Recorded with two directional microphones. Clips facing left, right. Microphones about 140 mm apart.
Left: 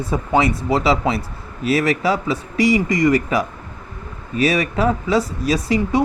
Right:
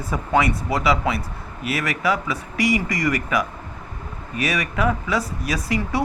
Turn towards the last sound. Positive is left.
turn(degrees=25)  # may be behind; listen again after turning